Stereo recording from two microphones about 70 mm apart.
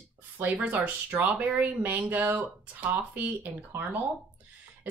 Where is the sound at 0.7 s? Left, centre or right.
Right.